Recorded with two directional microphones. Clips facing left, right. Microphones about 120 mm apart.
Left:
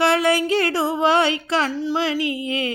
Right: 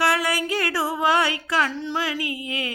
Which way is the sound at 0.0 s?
25° left (ahead or behind).